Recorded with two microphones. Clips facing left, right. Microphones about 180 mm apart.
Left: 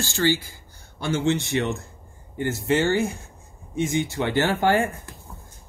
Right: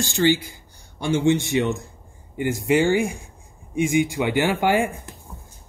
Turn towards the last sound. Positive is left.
turn(degrees=-15)  # may be behind; listen again after turning